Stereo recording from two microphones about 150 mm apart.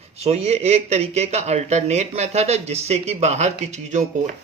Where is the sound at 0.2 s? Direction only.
45° right (ahead or behind).